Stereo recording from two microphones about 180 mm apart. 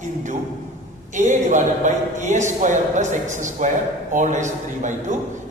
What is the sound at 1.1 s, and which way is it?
A man's voice, 45° right (ahead or behind).